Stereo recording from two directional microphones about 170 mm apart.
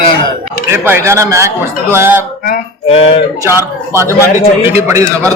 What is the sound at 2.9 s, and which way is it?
Speech, 35° left (ahead or behind).